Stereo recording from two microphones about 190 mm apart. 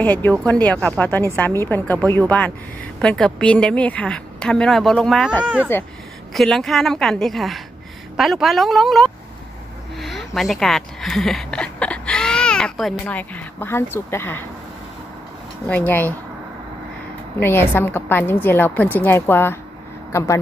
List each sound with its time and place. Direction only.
0.0 s a woman's voice: 10° left (ahead or behind)
15.7 s a woman's voice: 10° left (ahead or behind)
17.4 s a woman's voice: 10° left (ahead or behind)